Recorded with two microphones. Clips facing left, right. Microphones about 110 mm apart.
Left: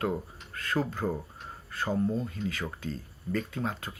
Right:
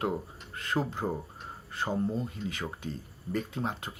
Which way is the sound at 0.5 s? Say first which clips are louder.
Left 1 dB; 20° right (ahead or behind).